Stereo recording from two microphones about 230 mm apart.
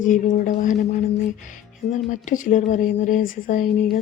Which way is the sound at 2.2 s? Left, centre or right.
Left.